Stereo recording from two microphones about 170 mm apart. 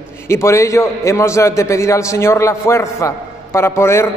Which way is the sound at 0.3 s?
15° left (ahead or behind).